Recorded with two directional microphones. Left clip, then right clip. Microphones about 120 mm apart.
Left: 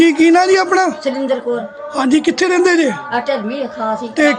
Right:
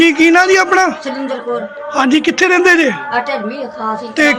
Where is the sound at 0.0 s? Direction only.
15° left (ahead or behind).